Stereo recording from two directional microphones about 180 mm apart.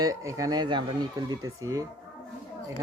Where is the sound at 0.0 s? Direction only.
15° right (ahead or behind).